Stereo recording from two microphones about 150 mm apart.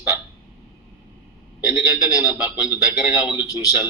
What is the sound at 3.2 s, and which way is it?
Speech, 30° left (ahead or behind).